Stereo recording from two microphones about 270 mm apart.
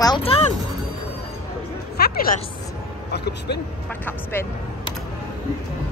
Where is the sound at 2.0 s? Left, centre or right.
Left.